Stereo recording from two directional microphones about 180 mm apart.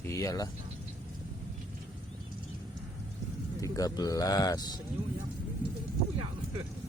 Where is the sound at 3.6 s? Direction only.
20° left (ahead or behind).